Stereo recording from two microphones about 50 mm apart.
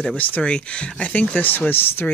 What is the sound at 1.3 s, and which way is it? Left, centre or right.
Speech, left.